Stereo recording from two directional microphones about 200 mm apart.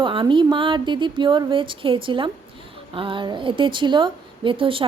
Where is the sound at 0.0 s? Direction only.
25° right (ahead or behind).